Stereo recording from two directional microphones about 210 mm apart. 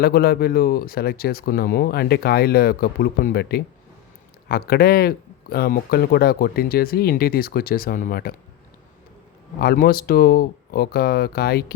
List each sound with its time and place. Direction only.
0.0 s speech: 45° left (ahead or behind)
9.6 s speech: 45° left (ahead or behind)